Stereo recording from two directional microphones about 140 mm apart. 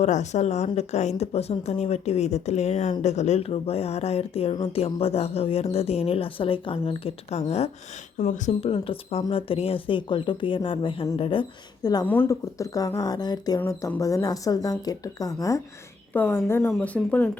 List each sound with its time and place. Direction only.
0.0 s speech: 55° left (ahead or behind)
8.2 s speech: 60° left (ahead or behind)
8.6 s speech: 40° left (ahead or behind)
12.0 s speech: 15° left (ahead or behind)